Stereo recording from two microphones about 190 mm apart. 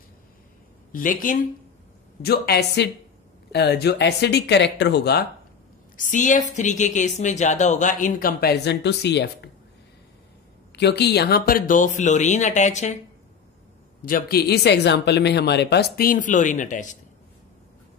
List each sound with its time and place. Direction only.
0.9 s speech: 45° left (ahead or behind)
2.2 s speech: 55° left (ahead or behind)
5.9 s speech: 40° left (ahead or behind); by 9.5 s 65° left (ahead or behind)
10.8 s speech: 60° left (ahead or behind); by 13.0 s 40° left (ahead or behind)
14.0 s speech: 50° left (ahead or behind)